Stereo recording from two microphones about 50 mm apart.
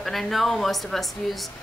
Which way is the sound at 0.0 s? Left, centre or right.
Centre.